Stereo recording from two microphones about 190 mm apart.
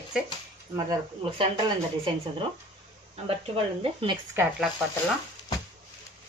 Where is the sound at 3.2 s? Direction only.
30° right (ahead or behind).